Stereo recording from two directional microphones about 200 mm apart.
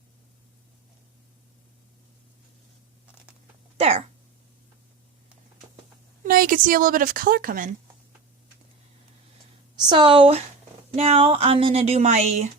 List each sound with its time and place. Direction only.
6.2 s a woman's voice: 45° right (ahead or behind)
9.9 s speech: 25° right (ahead or behind)